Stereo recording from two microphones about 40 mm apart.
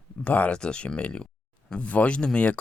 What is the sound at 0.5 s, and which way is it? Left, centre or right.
Speech, left.